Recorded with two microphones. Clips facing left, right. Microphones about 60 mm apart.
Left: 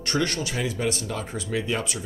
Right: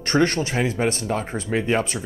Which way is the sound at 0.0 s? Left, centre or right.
Right.